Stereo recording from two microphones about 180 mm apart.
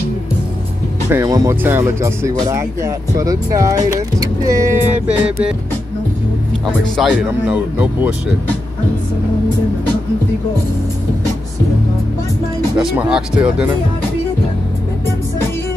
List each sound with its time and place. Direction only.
1.1 s speech: 15° right (ahead or behind)
5.0 s speech: 5° right (ahead or behind)
6.6 s speech: 5° right (ahead or behind)
12.7 s speech: 5° right (ahead or behind)